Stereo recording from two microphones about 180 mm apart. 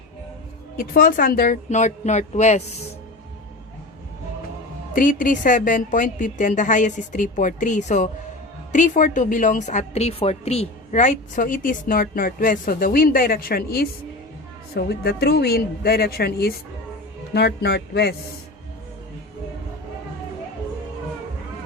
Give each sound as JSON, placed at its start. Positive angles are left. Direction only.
{"t": 0.9, "sound": "a woman's voice", "side_deg": 50}
{"t": 4.9, "sound": "a woman's voice", "side_deg": 50}